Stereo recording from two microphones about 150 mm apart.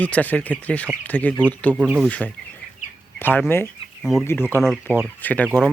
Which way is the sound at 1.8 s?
5° right (ahead or behind).